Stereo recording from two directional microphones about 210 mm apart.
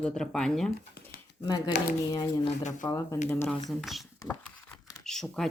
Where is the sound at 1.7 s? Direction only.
35° left (ahead or behind).